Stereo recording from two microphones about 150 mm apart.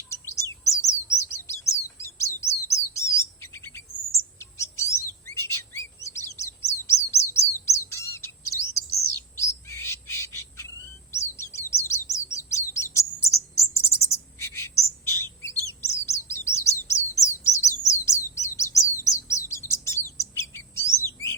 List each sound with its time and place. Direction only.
0.1 s chirp: 20° left (ahead or behind)
9.4 s bird: 20° left (ahead or behind)
15.8 s chirp: 20° left (ahead or behind)